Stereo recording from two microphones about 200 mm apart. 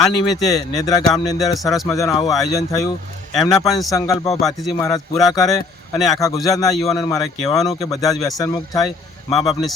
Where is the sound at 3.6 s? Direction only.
Centre (ahead or behind).